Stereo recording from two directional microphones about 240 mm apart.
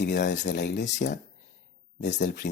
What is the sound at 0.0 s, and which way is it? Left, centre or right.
Speech, left.